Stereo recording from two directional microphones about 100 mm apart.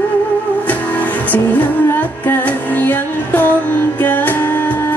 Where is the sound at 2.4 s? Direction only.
15° left (ahead or behind).